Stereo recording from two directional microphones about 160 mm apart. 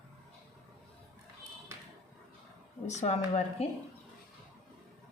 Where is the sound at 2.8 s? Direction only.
45° left (ahead or behind).